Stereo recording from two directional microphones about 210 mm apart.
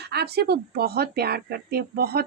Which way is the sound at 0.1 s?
50° right (ahead or behind).